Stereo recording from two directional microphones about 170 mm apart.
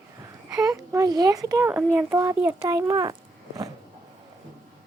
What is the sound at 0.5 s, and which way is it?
Speech, 20° right (ahead or behind).